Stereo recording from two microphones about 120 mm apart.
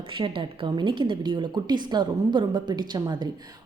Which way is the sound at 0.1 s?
45° right (ahead or behind).